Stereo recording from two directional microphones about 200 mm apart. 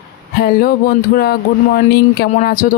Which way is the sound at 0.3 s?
50° left (ahead or behind).